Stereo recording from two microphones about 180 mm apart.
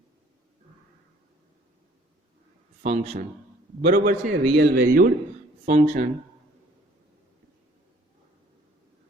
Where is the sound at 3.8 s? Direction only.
60° right (ahead or behind).